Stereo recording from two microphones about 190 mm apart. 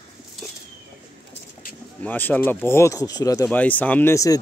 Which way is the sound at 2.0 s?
10° left (ahead or behind).